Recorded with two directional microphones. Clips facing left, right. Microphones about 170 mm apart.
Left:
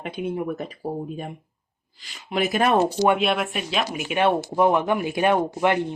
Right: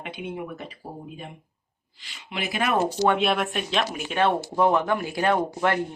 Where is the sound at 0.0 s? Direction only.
40° left (ahead or behind).